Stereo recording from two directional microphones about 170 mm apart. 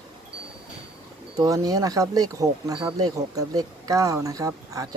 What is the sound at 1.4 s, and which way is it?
Speech, 20° right (ahead or behind).